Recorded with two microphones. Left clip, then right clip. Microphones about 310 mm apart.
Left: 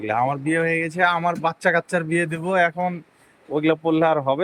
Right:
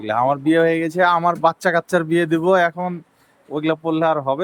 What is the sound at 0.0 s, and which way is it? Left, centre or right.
A man's voice, centre.